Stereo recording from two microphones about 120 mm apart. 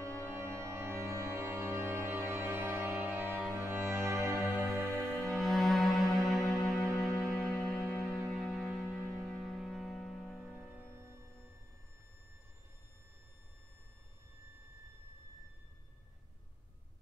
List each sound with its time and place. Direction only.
0.0 s music: 20° right (ahead or behind)
4.8 s music: 5° left (ahead or behind)